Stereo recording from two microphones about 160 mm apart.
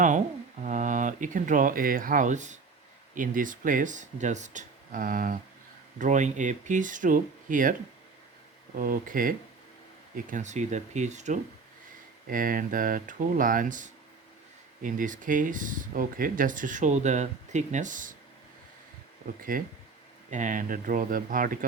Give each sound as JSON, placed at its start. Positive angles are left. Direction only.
{"t": 0.6, "sound": "speech", "side_deg": -50}
{"t": 12.3, "sound": "speech", "side_deg": -60}
{"t": 19.4, "sound": "speech", "side_deg": -60}